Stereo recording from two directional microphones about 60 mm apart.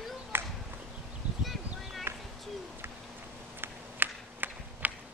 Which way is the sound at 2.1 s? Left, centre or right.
Right.